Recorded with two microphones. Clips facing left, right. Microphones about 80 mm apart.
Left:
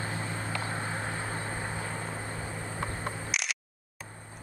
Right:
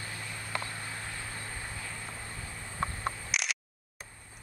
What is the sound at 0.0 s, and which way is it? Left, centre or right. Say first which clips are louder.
Vehicle: left 7 dB; left.